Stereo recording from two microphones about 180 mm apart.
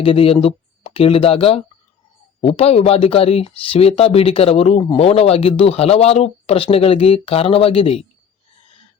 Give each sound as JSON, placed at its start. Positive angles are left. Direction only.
{"t": 0.0, "sound": "speech", "side_deg": 30}